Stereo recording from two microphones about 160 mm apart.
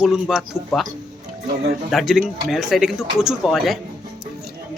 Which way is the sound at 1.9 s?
Centre (ahead or behind).